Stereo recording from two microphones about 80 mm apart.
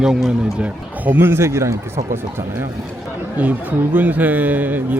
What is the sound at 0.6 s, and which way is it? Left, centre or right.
Speech, right.